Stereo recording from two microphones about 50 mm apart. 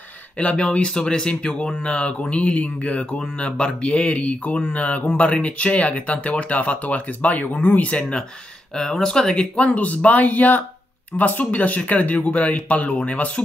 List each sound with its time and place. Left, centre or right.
0.4 s speech: centre
8.7 s speech: centre
9.8 s speech: left